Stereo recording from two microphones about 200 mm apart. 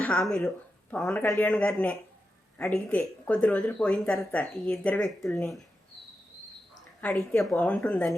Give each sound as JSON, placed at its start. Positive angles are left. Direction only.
{"t": 0.0, "sound": "speech", "side_deg": 5}
{"t": 6.7, "sound": "speech", "side_deg": 5}